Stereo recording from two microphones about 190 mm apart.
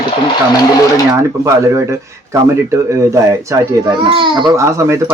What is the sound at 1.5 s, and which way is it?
Speech, 15° right (ahead or behind).